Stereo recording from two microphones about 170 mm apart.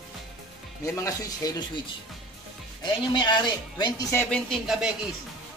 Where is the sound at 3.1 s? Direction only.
25° left (ahead or behind).